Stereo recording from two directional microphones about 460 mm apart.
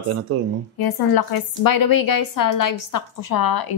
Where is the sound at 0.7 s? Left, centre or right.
Left.